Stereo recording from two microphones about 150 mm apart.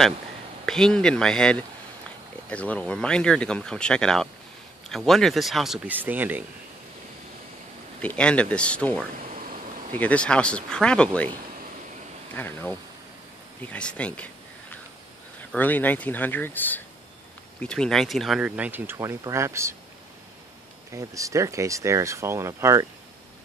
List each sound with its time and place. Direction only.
0.7 s speech: 5° left (ahead or behind); by 6.4 s 10° right (ahead or behind)
8.0 s speech: 10° left (ahead or behind)
12.4 s speech: 15° left (ahead or behind)
15.5 s speech: 10° left (ahead or behind); by 19.7 s 20° right (ahead or behind)
20.9 s speech: 20° right (ahead or behind)